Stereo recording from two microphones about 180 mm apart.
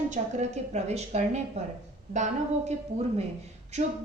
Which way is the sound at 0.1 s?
40° right (ahead or behind).